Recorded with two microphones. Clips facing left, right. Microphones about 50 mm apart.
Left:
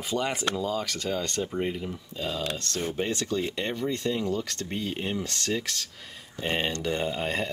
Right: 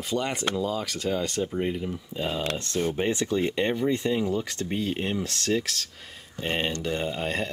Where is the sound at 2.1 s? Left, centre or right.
Right.